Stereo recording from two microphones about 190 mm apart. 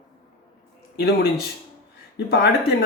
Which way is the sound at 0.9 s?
60° left (ahead or behind).